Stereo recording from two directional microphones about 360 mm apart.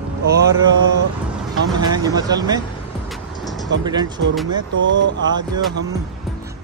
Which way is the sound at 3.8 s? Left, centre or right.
Centre.